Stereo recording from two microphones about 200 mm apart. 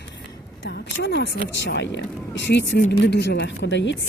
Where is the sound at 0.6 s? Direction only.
60° left (ahead or behind).